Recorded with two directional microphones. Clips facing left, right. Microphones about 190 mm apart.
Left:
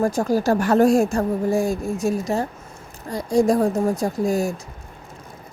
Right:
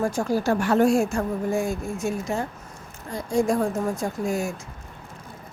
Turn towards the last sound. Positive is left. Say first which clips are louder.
# left 5 dB
turn(degrees=35)  # may be behind; listen again after turning